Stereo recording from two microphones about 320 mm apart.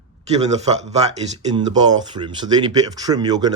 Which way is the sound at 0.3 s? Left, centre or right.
Centre.